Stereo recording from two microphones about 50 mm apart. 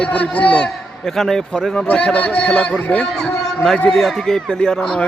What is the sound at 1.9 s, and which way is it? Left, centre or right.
A man's voice, left.